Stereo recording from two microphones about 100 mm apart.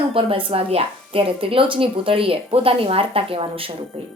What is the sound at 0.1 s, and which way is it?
Speech, 65° right (ahead or behind).